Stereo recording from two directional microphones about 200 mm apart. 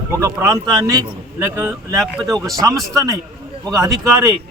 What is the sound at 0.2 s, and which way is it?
A man's voice, 15° right (ahead or behind).